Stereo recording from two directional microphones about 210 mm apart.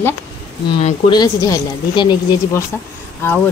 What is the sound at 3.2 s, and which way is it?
Speech, 10° left (ahead or behind).